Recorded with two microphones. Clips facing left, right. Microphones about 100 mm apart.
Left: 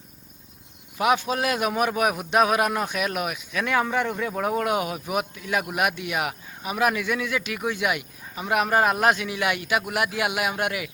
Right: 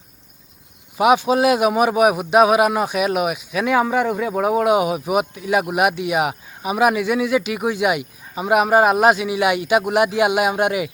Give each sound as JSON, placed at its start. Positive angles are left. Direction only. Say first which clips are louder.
{"t": 0.9, "sound": "a man's voice", "louder": "right 7 dB", "side_deg": -15}